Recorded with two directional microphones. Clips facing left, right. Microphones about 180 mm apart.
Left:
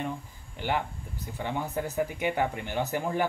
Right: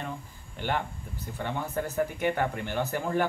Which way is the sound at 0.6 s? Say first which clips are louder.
Left 1 dB; 10° left (ahead or behind).